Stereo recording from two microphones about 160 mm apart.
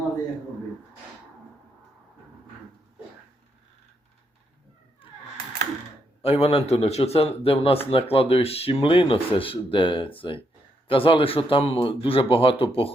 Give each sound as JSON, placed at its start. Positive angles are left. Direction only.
{"t": 6.2, "sound": "speech", "side_deg": 35}